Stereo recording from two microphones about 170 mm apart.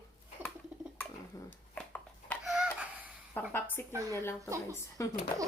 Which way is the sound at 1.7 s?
10° left (ahead or behind).